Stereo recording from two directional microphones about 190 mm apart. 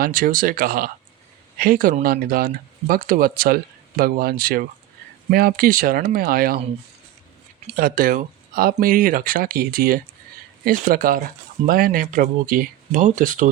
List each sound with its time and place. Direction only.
0.0 s speech: 45° right (ahead or behind)
7.8 s speech: 50° right (ahead or behind)